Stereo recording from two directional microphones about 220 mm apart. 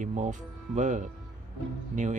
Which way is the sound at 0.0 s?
35° right (ahead or behind).